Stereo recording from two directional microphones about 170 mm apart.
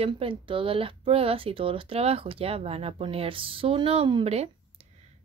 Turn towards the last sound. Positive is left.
turn(degrees=-35)  # may be behind; listen again after turning